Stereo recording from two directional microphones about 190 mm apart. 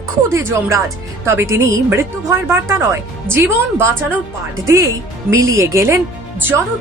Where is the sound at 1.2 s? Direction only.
15° right (ahead or behind).